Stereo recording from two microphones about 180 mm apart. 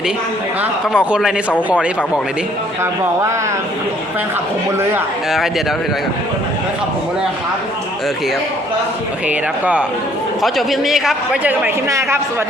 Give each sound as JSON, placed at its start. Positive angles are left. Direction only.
{"t": 0.6, "sound": "a man's voice", "side_deg": -5}
{"t": 2.8, "sound": "speech", "side_deg": -15}
{"t": 4.8, "sound": "speech", "side_deg": -15}
{"t": 5.3, "sound": "a man's voice", "side_deg": 0}
{"t": 9.2, "sound": "a man's voice", "side_deg": -5}